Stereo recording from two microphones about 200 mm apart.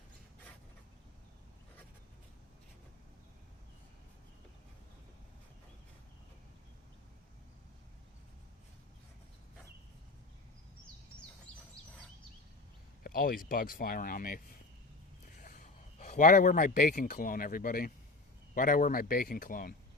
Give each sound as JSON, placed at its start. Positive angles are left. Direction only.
{"t": 13.0, "sound": "speech", "side_deg": 45}